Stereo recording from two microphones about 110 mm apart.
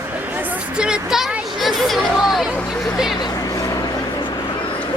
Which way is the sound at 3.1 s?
35° left (ahead or behind).